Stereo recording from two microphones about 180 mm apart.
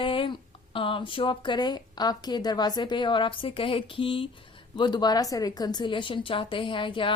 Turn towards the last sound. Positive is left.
turn(degrees=30)  # may be behind; listen again after turning